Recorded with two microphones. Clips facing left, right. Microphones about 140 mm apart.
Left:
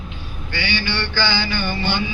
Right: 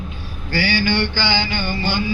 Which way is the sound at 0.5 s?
40° right (ahead or behind).